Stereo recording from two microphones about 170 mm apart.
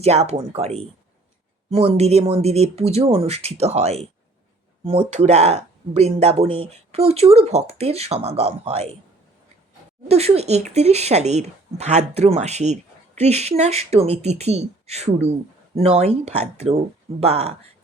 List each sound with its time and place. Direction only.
0.0 s speech: 40° right (ahead or behind)
10.1 s speech: 40° right (ahead or behind)